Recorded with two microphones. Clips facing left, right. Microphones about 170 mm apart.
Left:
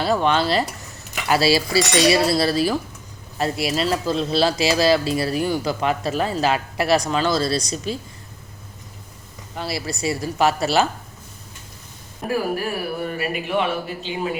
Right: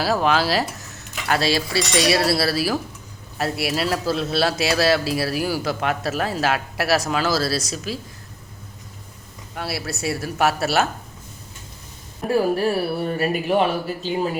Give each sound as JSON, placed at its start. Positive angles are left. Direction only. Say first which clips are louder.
{"t": 0.0, "sound": "speech", "louder": "even", "side_deg": -5}
{"t": 9.6, "sound": "speech", "louder": "left 1 dB", "side_deg": -5}
{"t": 12.3, "sound": "speech", "louder": "right 4 dB", "side_deg": -30}